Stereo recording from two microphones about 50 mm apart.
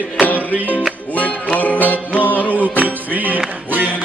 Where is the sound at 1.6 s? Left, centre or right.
Left.